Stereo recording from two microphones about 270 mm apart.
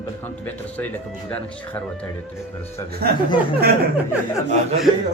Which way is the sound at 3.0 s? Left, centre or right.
Right.